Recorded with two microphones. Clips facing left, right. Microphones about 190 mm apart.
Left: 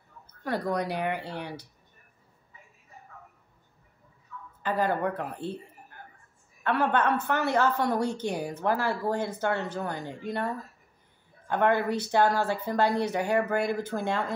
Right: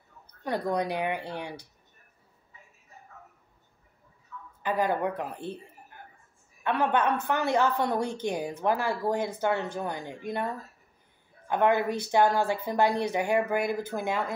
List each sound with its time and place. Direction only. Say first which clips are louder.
0.4 s a woman's voice: right 1 dB; 15° right (ahead or behind)
4.6 s a woman's voice: even; 15° right (ahead or behind)